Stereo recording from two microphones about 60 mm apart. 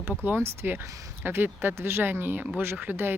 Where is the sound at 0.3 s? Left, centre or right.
Right.